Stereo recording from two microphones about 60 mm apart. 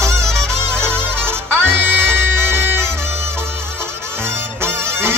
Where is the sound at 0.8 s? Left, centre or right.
Right.